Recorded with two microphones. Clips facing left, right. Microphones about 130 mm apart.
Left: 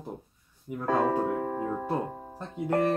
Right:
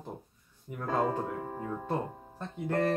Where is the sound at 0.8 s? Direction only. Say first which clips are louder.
Left 5 dB; 65° left (ahead or behind); by 1.9 s 80° left.